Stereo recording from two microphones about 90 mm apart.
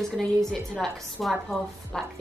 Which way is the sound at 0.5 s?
Centre (ahead or behind).